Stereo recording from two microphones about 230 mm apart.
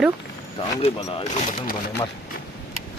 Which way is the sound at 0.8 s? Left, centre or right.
Left.